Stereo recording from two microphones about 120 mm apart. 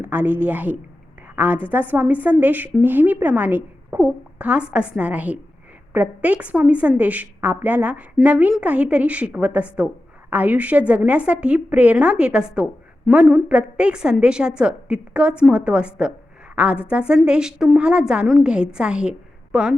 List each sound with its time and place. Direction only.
0.0 s a woman's voice: 15° right (ahead or behind)